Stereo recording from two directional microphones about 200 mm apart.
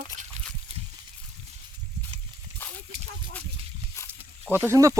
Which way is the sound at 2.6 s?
10° left (ahead or behind).